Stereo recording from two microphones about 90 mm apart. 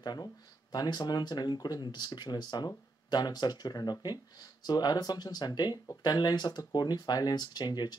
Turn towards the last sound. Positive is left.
turn(degrees=50)  # may be behind; listen again after turning